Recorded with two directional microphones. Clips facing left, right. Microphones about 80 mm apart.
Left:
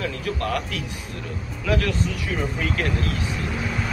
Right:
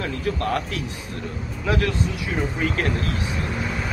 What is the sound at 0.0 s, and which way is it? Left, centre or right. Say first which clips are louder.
Speech: right 1 dB; right.